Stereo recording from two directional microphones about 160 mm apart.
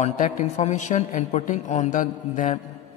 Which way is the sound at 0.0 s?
45° left (ahead or behind).